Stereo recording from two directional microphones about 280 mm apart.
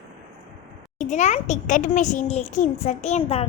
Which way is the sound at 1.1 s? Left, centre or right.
Left.